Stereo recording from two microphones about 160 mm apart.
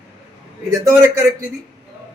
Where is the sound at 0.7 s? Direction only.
20° right (ahead or behind).